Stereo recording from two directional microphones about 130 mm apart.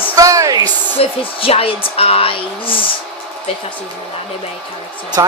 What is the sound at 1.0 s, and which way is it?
Speech, 50° left (ahead or behind).